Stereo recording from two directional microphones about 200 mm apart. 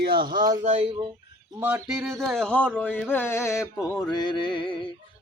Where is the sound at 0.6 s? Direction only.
35° right (ahead or behind).